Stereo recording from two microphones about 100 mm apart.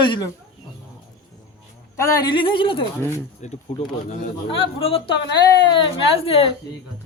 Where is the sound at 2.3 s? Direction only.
55° left (ahead or behind).